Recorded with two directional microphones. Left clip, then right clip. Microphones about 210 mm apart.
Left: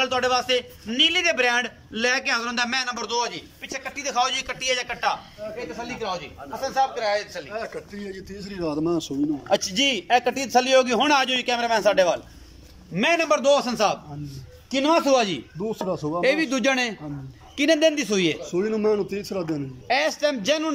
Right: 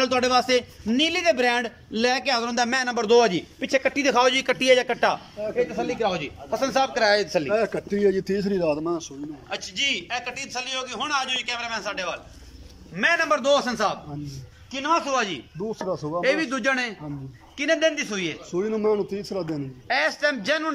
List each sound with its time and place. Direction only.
0.0 s a man's voice: 25° right (ahead or behind); by 8.5 s 55° right (ahead or behind)
8.8 s a man's voice: 15° left (ahead or behind)
9.5 s a man's voice: 35° left (ahead or behind)
12.9 s a man's voice: 15° left (ahead or behind)
14.7 s a man's voice: 20° left (ahead or behind)
15.6 s a man's voice: centre (ahead or behind)
16.2 s a man's voice: 15° left (ahead or behind)
18.4 s a man's voice: centre (ahead or behind)
19.9 s a man's voice: 15° left (ahead or behind)